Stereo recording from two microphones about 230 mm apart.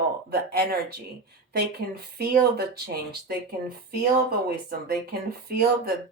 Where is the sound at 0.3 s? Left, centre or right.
Right.